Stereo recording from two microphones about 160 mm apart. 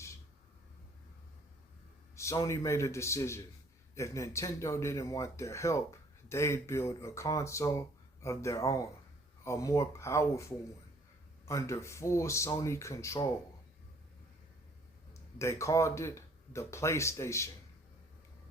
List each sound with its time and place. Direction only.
2.1 s speech: 20° left (ahead or behind)
15.4 s speech: 20° left (ahead or behind)